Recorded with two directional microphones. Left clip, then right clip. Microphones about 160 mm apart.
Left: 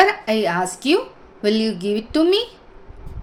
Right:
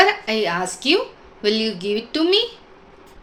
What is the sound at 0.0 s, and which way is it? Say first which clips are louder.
A woman's voice: left 1 dB; 35° left (ahead or behind).